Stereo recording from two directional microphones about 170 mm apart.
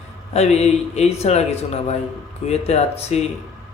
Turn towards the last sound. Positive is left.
turn(degrees=40)  # may be behind; listen again after turning